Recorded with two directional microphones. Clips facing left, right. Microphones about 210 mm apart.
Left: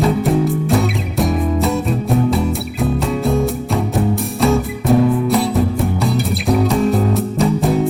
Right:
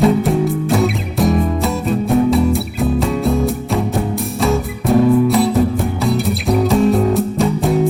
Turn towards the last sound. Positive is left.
turn(degrees=0)  # may be behind; listen again after turning